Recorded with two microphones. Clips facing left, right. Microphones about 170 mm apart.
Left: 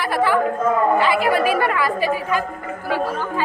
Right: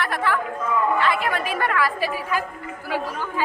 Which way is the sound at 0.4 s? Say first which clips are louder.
Left 6 dB; 45° left (ahead or behind).